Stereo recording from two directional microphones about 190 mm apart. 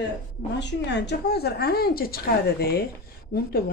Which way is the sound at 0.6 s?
65° left (ahead or behind).